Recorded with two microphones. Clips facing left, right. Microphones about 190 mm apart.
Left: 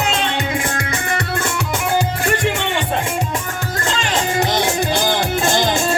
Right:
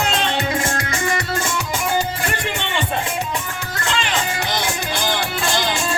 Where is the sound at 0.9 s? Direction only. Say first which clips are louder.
Even; 60° left (ahead or behind).